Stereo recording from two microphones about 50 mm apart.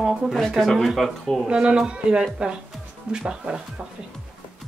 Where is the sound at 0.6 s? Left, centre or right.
Centre.